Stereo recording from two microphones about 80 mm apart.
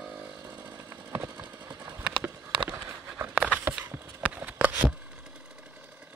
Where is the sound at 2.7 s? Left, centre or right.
Right.